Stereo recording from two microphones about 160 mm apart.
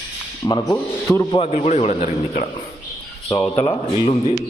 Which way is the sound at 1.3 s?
40° left (ahead or behind).